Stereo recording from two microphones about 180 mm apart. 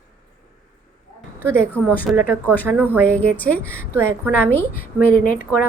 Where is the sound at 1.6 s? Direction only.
15° right (ahead or behind).